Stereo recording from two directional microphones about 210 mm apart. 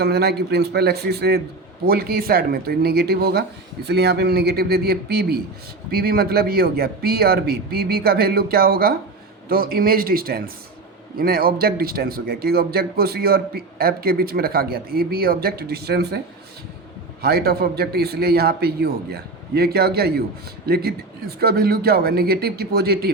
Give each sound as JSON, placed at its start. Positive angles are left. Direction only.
{"t": 0.0, "sound": "a man's voice", "side_deg": -50}
{"t": 17.2, "sound": "a man's voice", "side_deg": -50}